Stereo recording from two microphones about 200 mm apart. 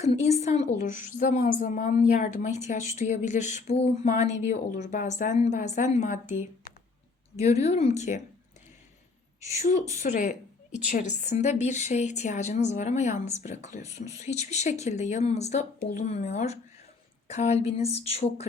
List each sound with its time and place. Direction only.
0.0 s a woman's voice: 30° left (ahead or behind)
7.4 s a woman's voice: 35° left (ahead or behind)
10.0 s a sound: 40° left (ahead or behind)
10.8 s a woman's voice: 40° left (ahead or behind)